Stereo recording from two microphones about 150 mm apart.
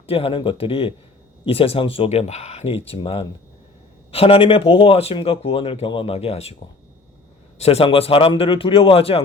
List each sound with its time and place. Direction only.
0.0 s speech: 40° left (ahead or behind)
7.6 s speech: 40° left (ahead or behind)